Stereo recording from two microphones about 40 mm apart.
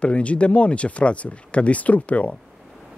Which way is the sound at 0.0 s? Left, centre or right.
Left.